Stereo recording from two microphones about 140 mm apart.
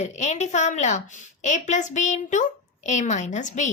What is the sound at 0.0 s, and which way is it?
Speech, 55° left (ahead or behind).